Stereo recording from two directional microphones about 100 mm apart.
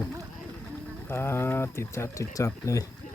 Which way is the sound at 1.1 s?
25° left (ahead or behind).